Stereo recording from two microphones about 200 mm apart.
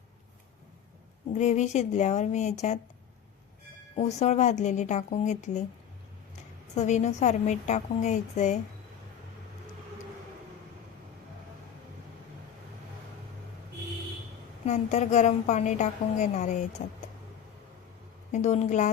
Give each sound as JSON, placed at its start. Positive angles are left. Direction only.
{"t": 1.3, "sound": "a woman's voice", "side_deg": 35}
{"t": 3.9, "sound": "a woman's voice", "side_deg": 35}
{"t": 6.7, "sound": "a woman's voice", "side_deg": 35}
{"t": 14.6, "sound": "a woman's voice", "side_deg": 35}
{"t": 18.3, "sound": "a woman's voice", "side_deg": 35}